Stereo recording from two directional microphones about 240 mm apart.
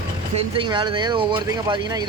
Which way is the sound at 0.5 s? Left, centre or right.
Centre.